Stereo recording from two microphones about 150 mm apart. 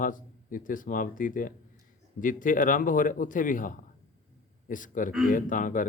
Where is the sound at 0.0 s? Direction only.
65° left (ahead or behind).